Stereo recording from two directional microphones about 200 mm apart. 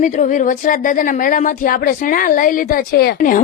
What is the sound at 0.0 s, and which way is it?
Speech, 40° left (ahead or behind).